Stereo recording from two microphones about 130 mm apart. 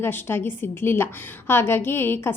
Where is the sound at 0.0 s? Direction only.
15° left (ahead or behind).